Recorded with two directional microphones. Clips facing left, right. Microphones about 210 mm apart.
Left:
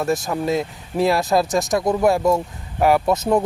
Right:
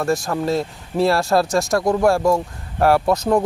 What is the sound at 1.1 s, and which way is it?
Speech, 20° left (ahead or behind).